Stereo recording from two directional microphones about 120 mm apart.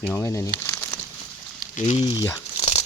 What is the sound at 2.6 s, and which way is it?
Tearing, 65° left (ahead or behind).